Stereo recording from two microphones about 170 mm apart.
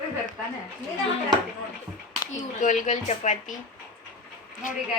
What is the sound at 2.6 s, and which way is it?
Speech, 45° left (ahead or behind).